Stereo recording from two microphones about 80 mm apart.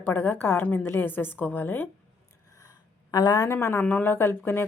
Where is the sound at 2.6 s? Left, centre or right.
Left.